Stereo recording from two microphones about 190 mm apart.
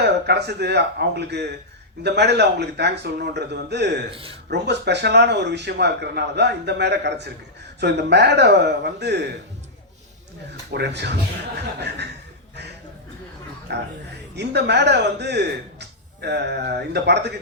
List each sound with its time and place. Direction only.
0.3 s a man's voice: 60° right (ahead or behind)
4.1 s speech: 30° right (ahead or behind)
4.4 s a man's voice: 65° right (ahead or behind)
10.7 s a man's voice: 65° right (ahead or behind)
13.7 s a man's voice: 60° right (ahead or behind)